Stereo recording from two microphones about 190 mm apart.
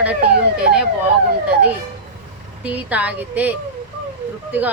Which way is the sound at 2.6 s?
10° right (ahead or behind).